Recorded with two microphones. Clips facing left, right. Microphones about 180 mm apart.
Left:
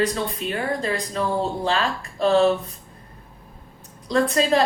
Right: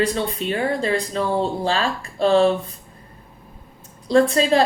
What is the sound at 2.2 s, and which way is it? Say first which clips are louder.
Speech: right 2 dB; 30° right (ahead or behind).